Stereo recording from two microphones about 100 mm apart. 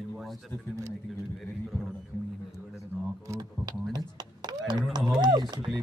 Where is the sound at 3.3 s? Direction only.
40° right (ahead or behind).